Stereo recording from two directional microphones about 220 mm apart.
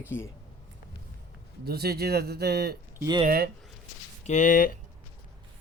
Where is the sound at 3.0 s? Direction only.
20° right (ahead or behind).